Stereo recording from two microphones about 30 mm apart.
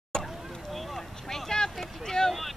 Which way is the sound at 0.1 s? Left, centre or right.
Left.